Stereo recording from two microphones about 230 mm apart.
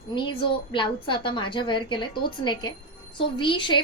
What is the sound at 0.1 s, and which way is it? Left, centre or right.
A woman's voice, left.